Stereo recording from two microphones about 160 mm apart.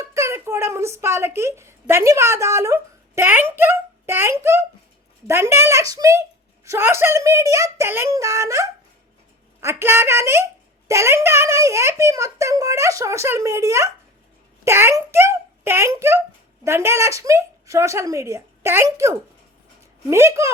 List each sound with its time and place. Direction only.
0.0 s a child's voice: 20° right (ahead or behind)